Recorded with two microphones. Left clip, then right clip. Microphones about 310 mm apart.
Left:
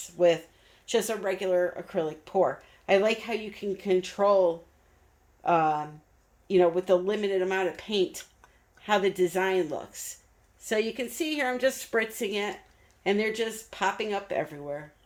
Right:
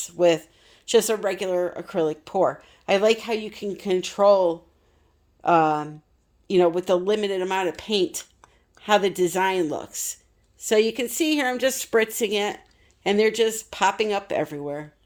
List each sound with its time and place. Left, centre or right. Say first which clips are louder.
0.0 s speech: right 4 dB; right